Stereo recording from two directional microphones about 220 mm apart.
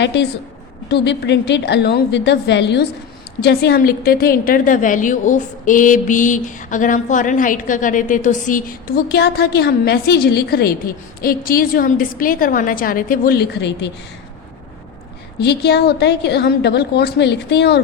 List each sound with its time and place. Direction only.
0.0 s a woman's voice: 55° left (ahead or behind)
15.4 s a woman's voice: 50° left (ahead or behind)